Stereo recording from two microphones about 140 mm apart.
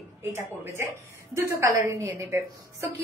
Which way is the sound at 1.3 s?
20° right (ahead or behind).